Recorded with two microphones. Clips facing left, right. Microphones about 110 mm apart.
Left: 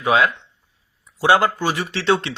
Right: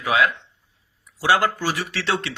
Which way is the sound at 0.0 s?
30° left (ahead or behind).